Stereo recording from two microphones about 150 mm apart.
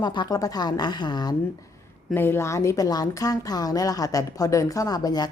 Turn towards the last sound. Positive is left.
turn(degrees=25)  # may be behind; listen again after turning